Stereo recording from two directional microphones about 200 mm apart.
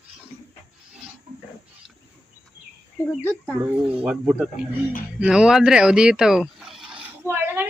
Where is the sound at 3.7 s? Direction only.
5° right (ahead or behind).